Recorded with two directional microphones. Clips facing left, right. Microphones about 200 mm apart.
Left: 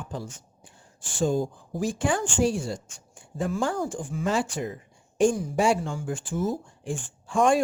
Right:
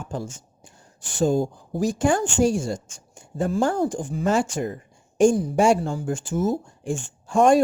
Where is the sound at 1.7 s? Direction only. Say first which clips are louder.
Right 5 dB; 40° right (ahead or behind).